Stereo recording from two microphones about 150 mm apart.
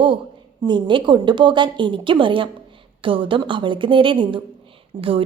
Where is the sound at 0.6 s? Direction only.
30° right (ahead or behind).